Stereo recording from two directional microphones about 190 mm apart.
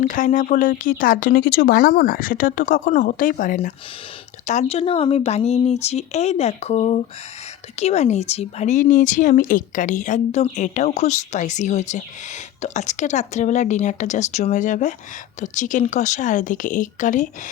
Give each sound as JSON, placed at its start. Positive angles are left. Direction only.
{"t": 0.0, "sound": "speech", "side_deg": 45}